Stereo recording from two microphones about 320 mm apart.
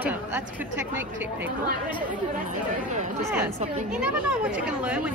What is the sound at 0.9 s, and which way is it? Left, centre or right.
Speech, centre.